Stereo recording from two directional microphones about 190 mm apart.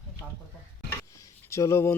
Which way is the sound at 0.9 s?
15° left (ahead or behind).